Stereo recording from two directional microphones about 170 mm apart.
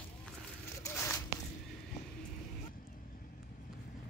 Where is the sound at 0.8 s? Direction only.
15° left (ahead or behind).